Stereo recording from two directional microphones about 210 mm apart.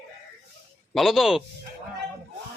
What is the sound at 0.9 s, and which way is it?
Speech, centre (ahead or behind).